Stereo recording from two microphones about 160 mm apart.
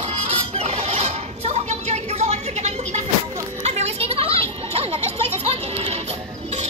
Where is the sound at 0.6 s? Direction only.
45° right (ahead or behind).